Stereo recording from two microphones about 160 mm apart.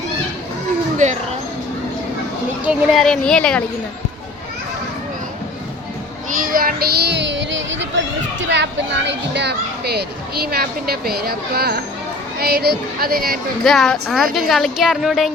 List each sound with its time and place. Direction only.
1.0 s a sound: 50° right (ahead or behind)
2.6 s speech: centre (ahead or behind)
6.4 s speech: 65° right (ahead or behind); by 7.3 s 90° right
8.5 s a child's voice: 90° right
10.4 s speech: 75° right (ahead or behind)
13.7 s speech: centre (ahead or behind)